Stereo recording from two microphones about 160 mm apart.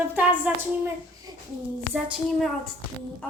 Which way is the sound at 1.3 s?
25° right (ahead or behind).